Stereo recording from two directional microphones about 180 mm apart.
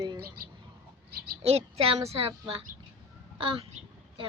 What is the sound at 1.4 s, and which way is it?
Speech, 35° right (ahead or behind).